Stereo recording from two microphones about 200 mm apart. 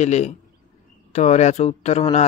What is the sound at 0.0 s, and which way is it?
Speech, 35° left (ahead or behind).